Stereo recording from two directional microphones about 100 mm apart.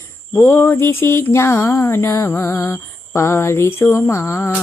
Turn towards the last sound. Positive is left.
turn(degrees=25)  # may be behind; listen again after turning